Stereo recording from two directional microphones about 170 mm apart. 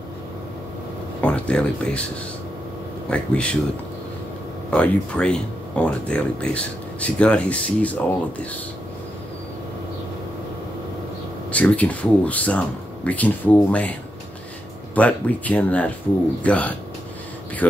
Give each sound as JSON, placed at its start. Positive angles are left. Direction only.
{"t": 1.2, "sound": "speech", "side_deg": 5}
{"t": 3.1, "sound": "speech", "side_deg": 5}
{"t": 4.6, "sound": "speech", "side_deg": 5}
{"t": 11.5, "sound": "speech", "side_deg": 5}
{"t": 15.0, "sound": "speech", "side_deg": 10}